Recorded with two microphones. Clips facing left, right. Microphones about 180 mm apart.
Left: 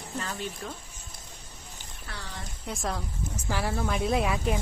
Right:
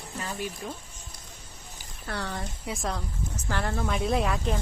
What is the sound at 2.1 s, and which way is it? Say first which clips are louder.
Speech: right 9 dB; 55° right (ahead or behind).